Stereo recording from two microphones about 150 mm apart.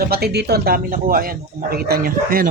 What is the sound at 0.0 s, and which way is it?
Speech, 90° right.